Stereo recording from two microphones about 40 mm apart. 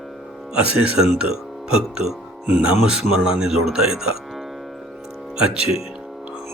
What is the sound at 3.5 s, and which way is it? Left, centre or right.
Speech, centre.